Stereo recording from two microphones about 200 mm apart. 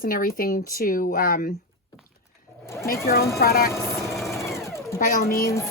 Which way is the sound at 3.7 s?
15° left (ahead or behind).